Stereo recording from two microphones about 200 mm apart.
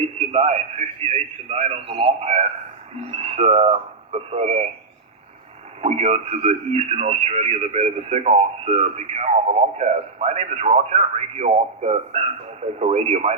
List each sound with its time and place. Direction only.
0.3 s a man's voice: 35° right (ahead or behind)
5.8 s a man's voice: 30° right (ahead or behind)